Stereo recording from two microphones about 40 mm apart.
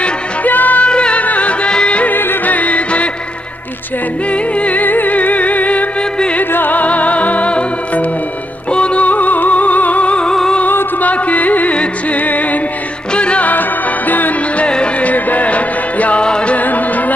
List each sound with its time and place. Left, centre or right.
0.5 s music: left
0.8 s music: left
2.0 s music: left
2.5 s music: left
4.3 s music: left
4.8 s music: left
11.0 s music: left
12.2 s music: left
13.1 s music: left
13.5 s music: left
14.6 s music: left
15.0 s music: left
16.5 s music: left